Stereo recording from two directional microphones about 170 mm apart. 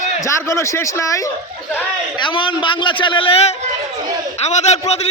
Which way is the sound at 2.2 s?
30° left (ahead or behind).